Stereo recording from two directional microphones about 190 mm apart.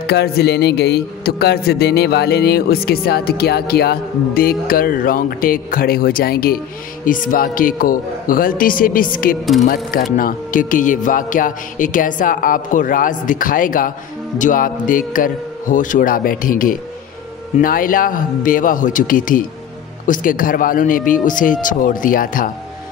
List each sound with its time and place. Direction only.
0.0 s speech: 60° left (ahead or behind)